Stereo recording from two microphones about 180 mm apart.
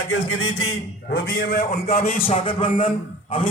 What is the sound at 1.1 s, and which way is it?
A man's voice, 55° left (ahead or behind).